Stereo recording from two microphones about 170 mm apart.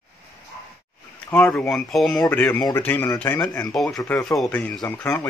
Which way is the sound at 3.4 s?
20° left (ahead or behind).